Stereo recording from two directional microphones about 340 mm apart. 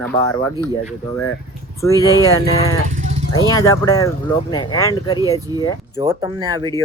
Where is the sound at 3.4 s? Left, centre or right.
Centre.